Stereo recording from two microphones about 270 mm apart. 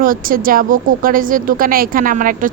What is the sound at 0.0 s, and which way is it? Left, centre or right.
A woman's voice, right.